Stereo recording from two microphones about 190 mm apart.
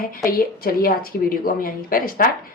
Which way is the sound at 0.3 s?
50° left (ahead or behind).